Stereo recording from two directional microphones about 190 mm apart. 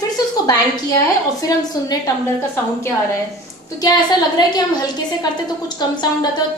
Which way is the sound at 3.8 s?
20° left (ahead or behind).